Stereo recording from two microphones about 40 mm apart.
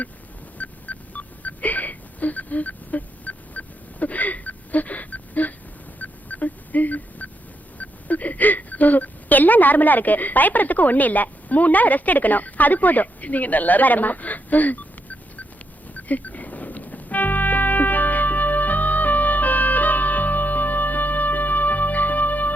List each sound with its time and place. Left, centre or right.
0.6 s wail: left
6.0 s a sound: left
7.8 s a woman's voice: left
16.0 s music: left